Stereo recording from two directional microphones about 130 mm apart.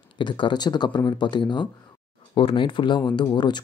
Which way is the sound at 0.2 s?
35° left (ahead or behind).